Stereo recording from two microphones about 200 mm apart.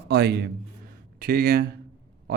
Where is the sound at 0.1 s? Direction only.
55° right (ahead or behind).